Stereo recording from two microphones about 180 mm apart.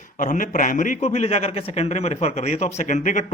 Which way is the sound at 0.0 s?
45° left (ahead or behind).